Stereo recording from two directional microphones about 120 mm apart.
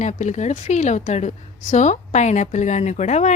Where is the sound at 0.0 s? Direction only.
80° left.